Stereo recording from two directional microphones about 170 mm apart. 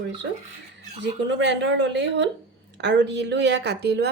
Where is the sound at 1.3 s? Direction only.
90° right.